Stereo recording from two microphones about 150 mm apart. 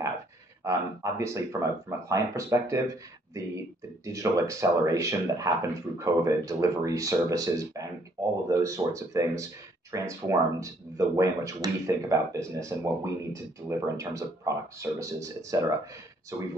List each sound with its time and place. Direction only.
0.7 s speech: 20° right (ahead or behind)